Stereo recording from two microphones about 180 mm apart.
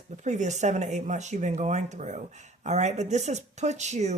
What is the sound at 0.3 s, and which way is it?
Speech, 40° right (ahead or behind).